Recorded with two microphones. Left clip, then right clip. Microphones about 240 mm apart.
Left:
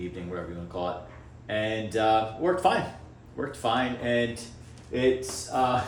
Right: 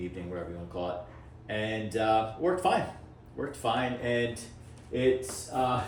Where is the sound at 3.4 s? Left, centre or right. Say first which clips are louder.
Left 2 dB; left.